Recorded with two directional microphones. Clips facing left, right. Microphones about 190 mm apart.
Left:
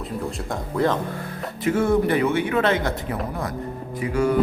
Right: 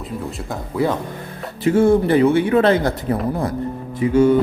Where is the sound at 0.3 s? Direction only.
5° right (ahead or behind).